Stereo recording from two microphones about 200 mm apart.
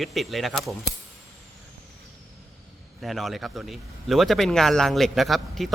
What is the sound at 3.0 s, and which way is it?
Speech, centre (ahead or behind).